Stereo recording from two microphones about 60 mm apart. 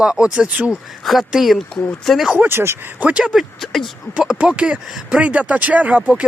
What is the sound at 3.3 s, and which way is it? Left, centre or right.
Speech, centre.